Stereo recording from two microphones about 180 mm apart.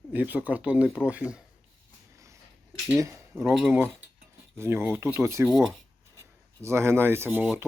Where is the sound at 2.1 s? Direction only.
15° right (ahead or behind).